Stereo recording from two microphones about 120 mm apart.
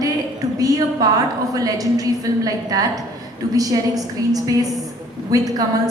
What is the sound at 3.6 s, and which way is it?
A woman's voice, 30° right (ahead or behind).